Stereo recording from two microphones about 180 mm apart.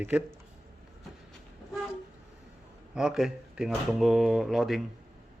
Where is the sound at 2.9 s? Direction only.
5° right (ahead or behind).